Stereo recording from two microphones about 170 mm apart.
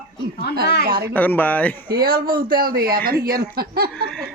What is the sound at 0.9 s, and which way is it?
Speech, 60° right (ahead or behind).